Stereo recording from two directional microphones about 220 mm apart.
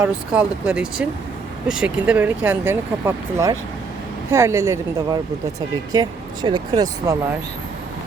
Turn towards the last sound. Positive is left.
turn(degrees=-15)  # may be behind; listen again after turning